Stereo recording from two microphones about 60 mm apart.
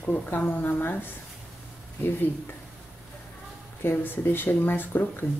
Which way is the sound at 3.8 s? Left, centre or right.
Left.